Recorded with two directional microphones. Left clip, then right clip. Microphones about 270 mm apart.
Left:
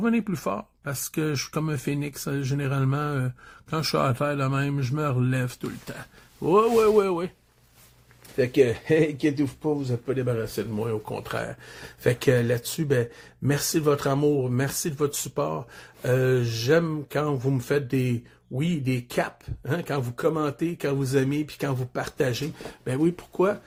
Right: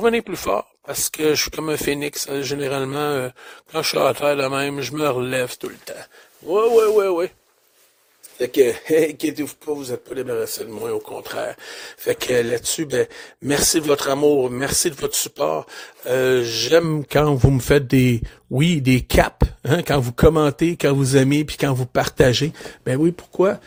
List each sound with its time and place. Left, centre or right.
0.0 s speech: right
6.5 s speech: centre
8.4 s speech: right
10.8 s speech: right